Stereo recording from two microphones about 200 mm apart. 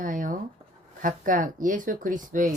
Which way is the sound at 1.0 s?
40° right (ahead or behind).